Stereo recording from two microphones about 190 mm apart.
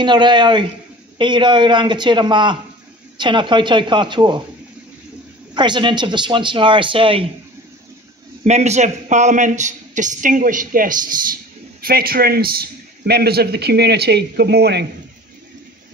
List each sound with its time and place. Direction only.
0.0 s a man's voice: 25° right (ahead or behind)
5.5 s a man's voice: 25° right (ahead or behind)
8.5 s a man's voice: 35° right (ahead or behind); by 14.9 s 60° right (ahead or behind)